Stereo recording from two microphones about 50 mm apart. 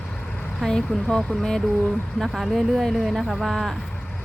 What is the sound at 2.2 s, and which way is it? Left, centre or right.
Speech, centre.